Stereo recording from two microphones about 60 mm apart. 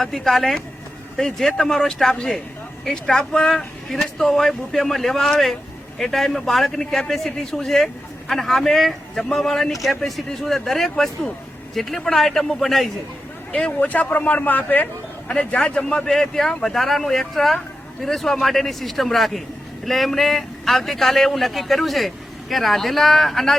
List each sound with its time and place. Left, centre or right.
0.0 s speech: centre
13.5 s speech: centre
13.7 s a man's voice: left; by 23.6 s centre